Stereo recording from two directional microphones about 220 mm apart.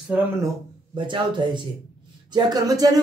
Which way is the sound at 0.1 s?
5° right (ahead or behind).